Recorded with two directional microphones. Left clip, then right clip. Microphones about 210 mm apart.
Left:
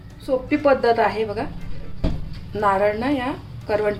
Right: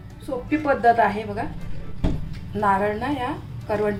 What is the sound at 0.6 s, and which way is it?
Speech, 35° left (ahead or behind).